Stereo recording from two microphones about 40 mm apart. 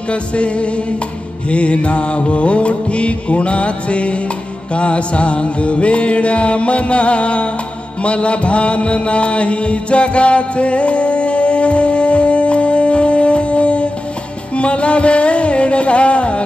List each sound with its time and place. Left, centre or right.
0.1 s music: left
8.0 s mantra: left
14.5 s music: left